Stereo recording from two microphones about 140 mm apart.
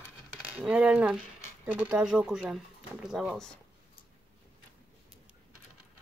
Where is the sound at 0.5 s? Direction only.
10° right (ahead or behind).